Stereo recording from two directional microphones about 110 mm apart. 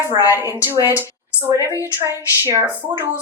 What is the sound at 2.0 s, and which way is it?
Speech, 25° right (ahead or behind).